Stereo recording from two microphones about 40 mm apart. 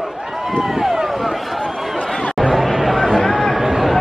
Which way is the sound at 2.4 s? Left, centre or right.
Centre.